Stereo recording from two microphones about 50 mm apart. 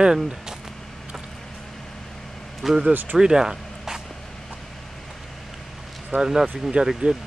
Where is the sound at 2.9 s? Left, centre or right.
Right.